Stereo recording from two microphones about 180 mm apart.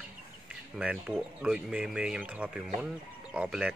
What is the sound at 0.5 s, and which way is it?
Speech, 5° right (ahead or behind).